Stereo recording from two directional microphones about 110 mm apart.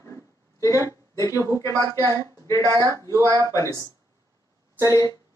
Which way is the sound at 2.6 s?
30° right (ahead or behind).